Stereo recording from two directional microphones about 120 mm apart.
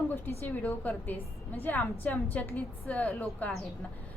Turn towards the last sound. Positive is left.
turn(degrees=15)  # may be behind; listen again after turning